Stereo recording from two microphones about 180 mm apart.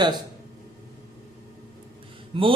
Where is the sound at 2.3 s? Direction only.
30° right (ahead or behind).